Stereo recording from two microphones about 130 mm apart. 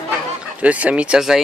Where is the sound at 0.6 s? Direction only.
10° right (ahead or behind).